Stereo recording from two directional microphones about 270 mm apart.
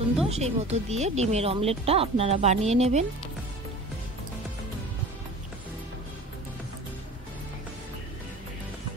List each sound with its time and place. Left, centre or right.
0.3 s speech: right